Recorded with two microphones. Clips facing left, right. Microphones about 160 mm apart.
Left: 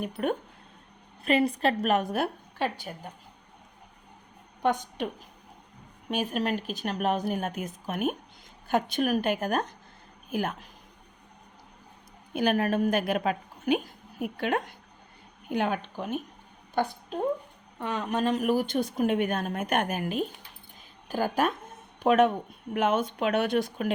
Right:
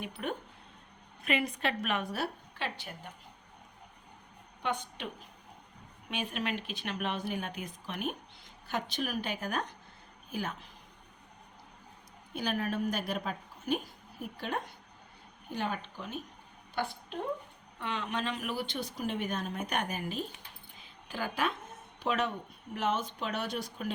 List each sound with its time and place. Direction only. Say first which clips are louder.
0.0 s a woman's voice: left 8 dB; 50° left (ahead or behind)
1.2 s a woman's voice: left 8 dB; 35° left (ahead or behind)
4.6 s a woman's voice: left 8 dB; 45° left (ahead or behind)
6.1 s a woman's voice: left 7 dB; 40° left (ahead or behind)
12.3 s a woman's voice: left 8 dB; 55° left (ahead or behind)
16.7 s a woman's voice: left 7 dB; 40° left (ahead or behind); by 20.2 s 60° left (ahead or behind)
21.1 s a woman's voice: left 7 dB; 45° left (ahead or behind); by 23.9 s 60° left (ahead or behind)